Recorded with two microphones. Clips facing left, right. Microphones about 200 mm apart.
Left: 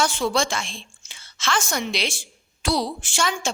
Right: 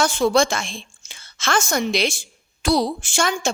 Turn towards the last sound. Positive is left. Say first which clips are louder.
# right 3 dB
turn(degrees=-45)  # may be behind; listen again after turning